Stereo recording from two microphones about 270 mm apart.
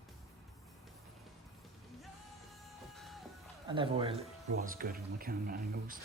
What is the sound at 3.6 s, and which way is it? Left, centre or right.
Speech, centre.